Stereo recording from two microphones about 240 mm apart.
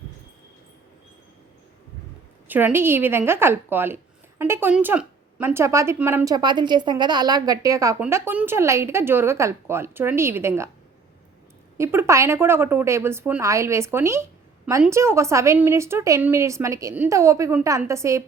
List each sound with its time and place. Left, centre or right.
2.5 s a woman's voice: centre
11.8 s a woman's voice: centre